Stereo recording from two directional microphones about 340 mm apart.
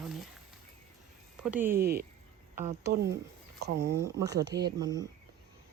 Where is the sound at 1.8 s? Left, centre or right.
Right.